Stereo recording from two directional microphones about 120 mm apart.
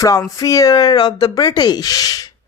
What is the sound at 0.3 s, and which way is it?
A man's voice, 25° left (ahead or behind).